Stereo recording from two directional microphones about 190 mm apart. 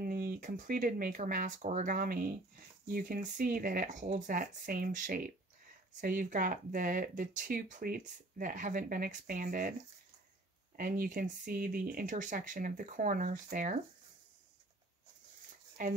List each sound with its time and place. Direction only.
0.0 s speech: 50° right (ahead or behind)
10.8 s speech: 45° right (ahead or behind)
15.8 s speech: 45° right (ahead or behind)